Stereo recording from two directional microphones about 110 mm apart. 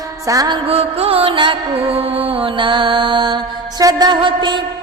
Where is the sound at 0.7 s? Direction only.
65° right (ahead or behind).